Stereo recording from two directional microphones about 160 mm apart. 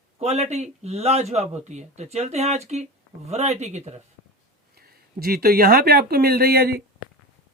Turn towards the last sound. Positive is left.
turn(degrees=-70)  # may be behind; listen again after turning